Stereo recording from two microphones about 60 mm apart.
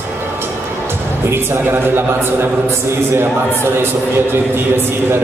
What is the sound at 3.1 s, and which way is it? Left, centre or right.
A man's voice, right.